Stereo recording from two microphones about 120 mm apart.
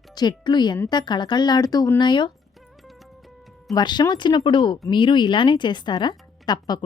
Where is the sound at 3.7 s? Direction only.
35° left (ahead or behind).